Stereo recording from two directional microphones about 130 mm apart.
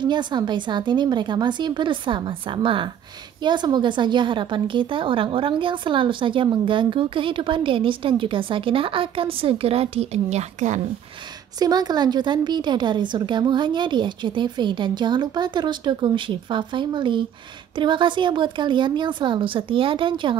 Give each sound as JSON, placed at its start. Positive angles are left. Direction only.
{"t": 0.0, "sound": "a woman's voice", "side_deg": -35}
{"t": 11.6, "sound": "a woman's voice", "side_deg": -30}